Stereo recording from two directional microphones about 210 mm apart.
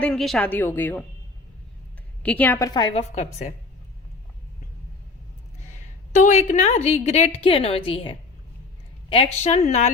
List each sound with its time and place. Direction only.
0.0 s a woman's voice: centre (ahead or behind)
2.2 s a woman's voice: 10° left (ahead or behind); by 3.2 s 30° left (ahead or behind)
6.1 s a woman's voice: 35° left (ahead or behind)